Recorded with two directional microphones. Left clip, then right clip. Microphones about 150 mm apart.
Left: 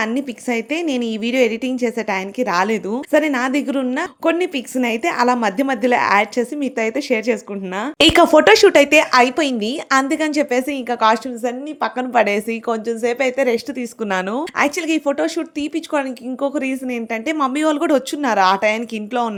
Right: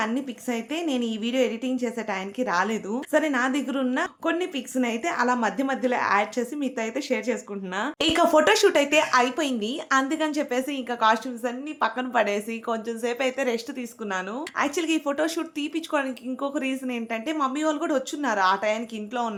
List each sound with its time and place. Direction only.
0.0 s a woman's voice: 45° left (ahead or behind)
7.9 s a woman's voice: 55° left (ahead or behind); by 13.6 s 40° left (ahead or behind)
14.0 s a woman's voice: 60° left (ahead or behind)